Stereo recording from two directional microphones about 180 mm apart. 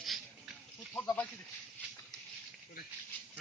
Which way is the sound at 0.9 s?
10° left (ahead or behind).